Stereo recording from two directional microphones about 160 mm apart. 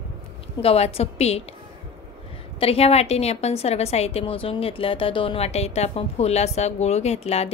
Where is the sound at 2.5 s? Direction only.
40° left (ahead or behind).